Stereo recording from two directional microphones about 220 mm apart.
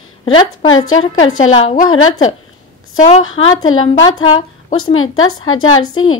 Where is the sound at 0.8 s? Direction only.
65° left (ahead or behind).